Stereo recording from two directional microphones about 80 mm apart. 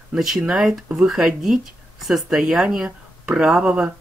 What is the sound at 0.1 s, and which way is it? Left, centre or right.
Speech, centre.